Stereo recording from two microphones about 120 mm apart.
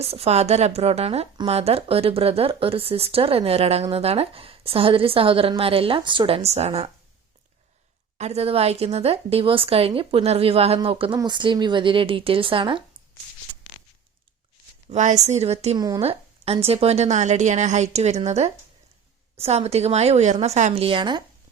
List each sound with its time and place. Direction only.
0.0 s speech: 55° right (ahead or behind)
8.2 s speech: 60° right (ahead or behind)
11.2 s speech: 40° right (ahead or behind)
14.8 s a woman's voice: 80° right; by 21.2 s 40° right (ahead or behind)